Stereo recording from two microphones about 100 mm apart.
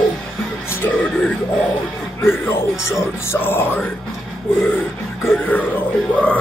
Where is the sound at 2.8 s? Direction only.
25° left (ahead or behind).